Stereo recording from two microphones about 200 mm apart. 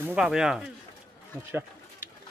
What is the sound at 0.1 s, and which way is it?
Speech, centre (ahead or behind).